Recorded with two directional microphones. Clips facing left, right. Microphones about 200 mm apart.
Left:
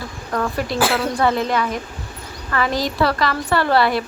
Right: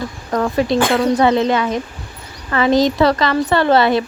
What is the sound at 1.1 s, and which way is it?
Speech, 20° right (ahead or behind).